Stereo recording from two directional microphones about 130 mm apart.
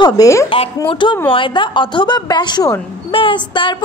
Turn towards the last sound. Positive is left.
turn(degrees=40)  # may be behind; listen again after turning